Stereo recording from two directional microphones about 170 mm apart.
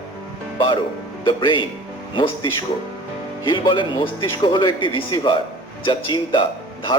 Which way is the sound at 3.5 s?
30° left (ahead or behind).